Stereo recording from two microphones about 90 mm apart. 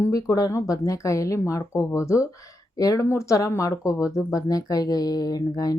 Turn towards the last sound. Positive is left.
turn(degrees=45)  # may be behind; listen again after turning